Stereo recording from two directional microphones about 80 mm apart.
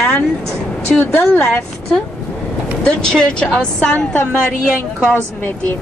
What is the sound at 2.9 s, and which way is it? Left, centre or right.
A woman's voice, centre.